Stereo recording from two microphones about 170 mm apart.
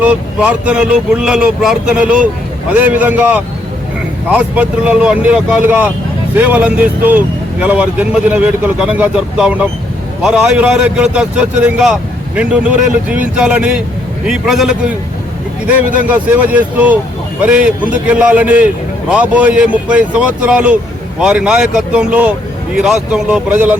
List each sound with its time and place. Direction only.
0.0 s a man's voice: 5° right (ahead or behind)